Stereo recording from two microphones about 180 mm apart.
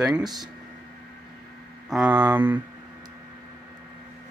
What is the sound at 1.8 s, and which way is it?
Mantra, 5° right (ahead or behind).